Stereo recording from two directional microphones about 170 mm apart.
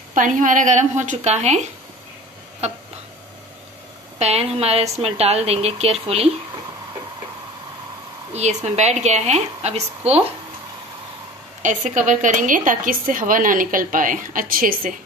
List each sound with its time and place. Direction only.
0.1 s a woman's voice: 50° right (ahead or behind)
4.2 s a woman's voice: 40° right (ahead or behind)
8.3 s a sound: 40° right (ahead or behind)
8.6 s a woman's voice: 40° right (ahead or behind)
11.6 s a woman's voice: 45° right (ahead or behind)